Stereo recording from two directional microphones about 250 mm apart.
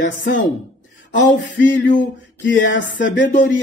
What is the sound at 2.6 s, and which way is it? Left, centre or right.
Music, left.